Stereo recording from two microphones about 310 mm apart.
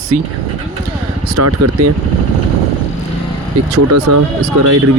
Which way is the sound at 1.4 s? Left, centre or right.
Right.